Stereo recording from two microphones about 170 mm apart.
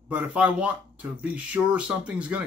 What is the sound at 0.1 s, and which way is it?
Speech, 10° right (ahead or behind).